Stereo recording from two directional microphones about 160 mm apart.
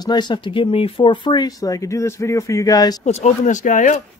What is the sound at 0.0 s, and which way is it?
Speech, 25° left (ahead or behind).